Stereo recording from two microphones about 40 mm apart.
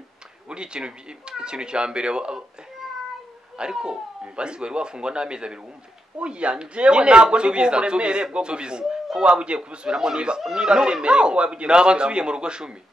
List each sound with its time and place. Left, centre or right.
0.5 s a man's voice: right
3.5 s a man's voice: right